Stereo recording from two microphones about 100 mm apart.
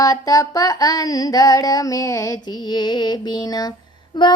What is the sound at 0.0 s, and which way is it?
Music, 35° left (ahead or behind).